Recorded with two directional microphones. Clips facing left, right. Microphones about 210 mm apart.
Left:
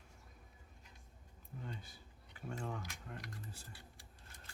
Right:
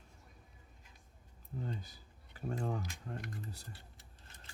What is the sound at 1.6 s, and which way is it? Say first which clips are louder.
Speech: right 5 dB; 40° right (ahead or behind).